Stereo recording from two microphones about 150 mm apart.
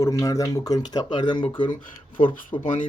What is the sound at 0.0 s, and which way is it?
Speech, 20° left (ahead or behind).